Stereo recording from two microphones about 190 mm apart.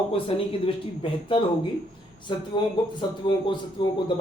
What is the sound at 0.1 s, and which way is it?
Speech, 30° left (ahead or behind).